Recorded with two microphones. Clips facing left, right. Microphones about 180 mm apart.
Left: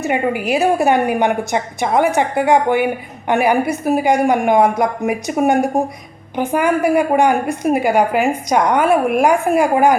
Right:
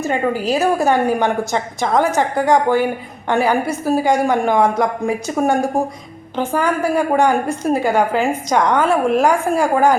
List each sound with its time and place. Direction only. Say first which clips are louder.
0.0 s a woman's voice: even; 15° left (ahead or behind)